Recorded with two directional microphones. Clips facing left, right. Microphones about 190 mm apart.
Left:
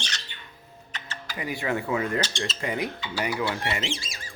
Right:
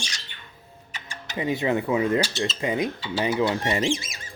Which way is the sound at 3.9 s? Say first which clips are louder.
Right 6 dB; 20° right (ahead or behind).